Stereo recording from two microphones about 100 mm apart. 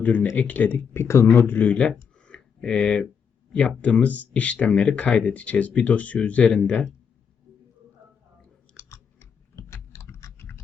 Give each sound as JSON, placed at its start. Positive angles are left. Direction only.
{"t": 0.0, "sound": "speech", "side_deg": 15}
{"t": 2.2, "sound": "a sound", "side_deg": 10}
{"t": 3.8, "sound": "speech", "side_deg": 15}
{"t": 8.9, "sound": "typing", "side_deg": 30}